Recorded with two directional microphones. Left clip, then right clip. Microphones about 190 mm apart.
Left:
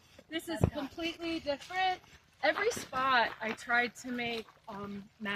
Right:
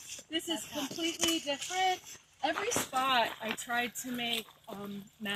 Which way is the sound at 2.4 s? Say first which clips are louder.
Left 3 dB; 5° right (ahead or behind).